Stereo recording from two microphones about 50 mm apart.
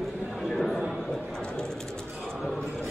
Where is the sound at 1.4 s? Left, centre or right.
Centre.